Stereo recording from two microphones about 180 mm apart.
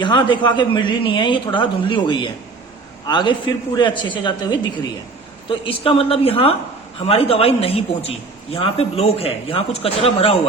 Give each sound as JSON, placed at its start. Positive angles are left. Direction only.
{"t": 0.0, "sound": "a man's voice", "side_deg": 25}